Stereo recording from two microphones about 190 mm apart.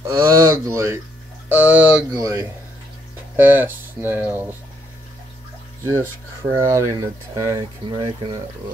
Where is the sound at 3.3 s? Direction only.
10° right (ahead or behind).